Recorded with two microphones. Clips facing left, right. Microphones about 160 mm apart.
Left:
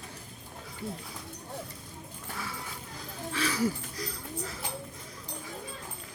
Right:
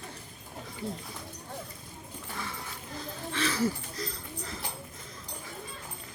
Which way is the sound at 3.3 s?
10° left (ahead or behind).